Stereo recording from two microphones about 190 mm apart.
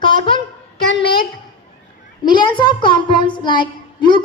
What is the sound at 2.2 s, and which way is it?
A child's voice, 25° left (ahead or behind).